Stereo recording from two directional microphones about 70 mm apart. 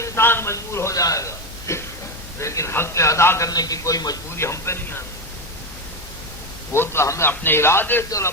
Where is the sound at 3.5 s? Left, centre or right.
Left.